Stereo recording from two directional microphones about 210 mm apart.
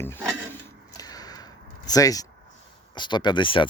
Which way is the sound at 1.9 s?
15° left (ahead or behind).